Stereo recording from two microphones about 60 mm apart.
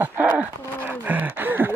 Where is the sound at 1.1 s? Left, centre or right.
Right.